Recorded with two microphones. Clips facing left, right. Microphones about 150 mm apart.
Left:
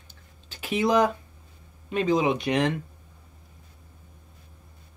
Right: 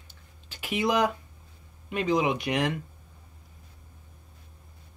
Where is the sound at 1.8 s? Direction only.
25° left (ahead or behind).